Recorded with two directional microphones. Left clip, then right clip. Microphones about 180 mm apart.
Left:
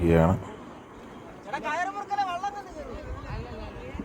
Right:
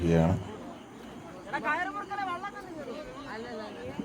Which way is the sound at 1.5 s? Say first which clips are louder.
Even; 30° left (ahead or behind).